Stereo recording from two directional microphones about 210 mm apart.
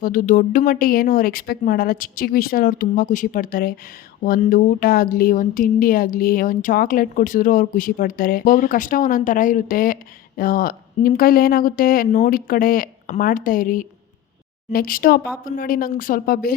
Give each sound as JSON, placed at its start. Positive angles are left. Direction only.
{"t": 0.0, "sound": "speech", "side_deg": 40}